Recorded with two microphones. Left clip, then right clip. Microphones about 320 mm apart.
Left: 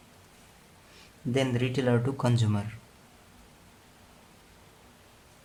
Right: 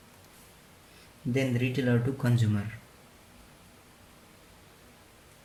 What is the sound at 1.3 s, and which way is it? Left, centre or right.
Speech, centre.